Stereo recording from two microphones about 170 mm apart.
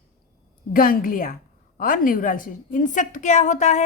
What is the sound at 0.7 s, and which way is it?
A woman's voice, 55° left (ahead or behind).